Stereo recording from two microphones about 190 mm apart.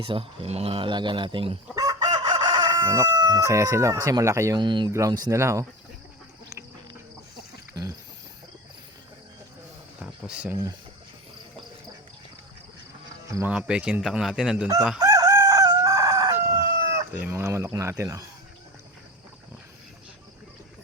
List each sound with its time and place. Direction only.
0.0 s speech: 30° right (ahead or behind)
7.7 s a sound: 15° right (ahead or behind)
10.0 s a sound: 5° right (ahead or behind)
13.2 s speech: 15° right (ahead or behind)
13.5 s speech: 5° right (ahead or behind)
14.9 s chicken: 15° right (ahead or behind)
17.2 s speech: 10° right (ahead or behind)